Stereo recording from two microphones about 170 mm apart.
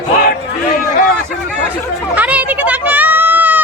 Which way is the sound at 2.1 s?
10° right (ahead or behind).